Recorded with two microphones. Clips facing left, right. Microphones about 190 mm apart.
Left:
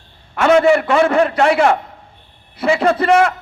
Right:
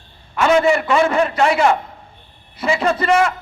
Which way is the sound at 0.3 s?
60° left (ahead or behind).